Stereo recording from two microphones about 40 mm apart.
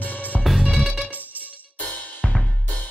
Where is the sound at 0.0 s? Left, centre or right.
Left.